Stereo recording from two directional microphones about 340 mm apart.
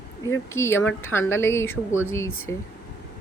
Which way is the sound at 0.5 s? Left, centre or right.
Centre.